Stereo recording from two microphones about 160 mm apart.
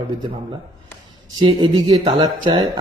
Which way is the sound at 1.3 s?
25° right (ahead or behind).